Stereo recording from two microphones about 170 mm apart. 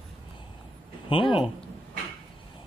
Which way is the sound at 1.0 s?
30° left (ahead or behind).